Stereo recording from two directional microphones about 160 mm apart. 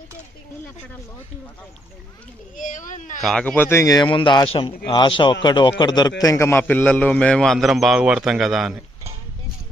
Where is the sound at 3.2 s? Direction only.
5° left (ahead or behind).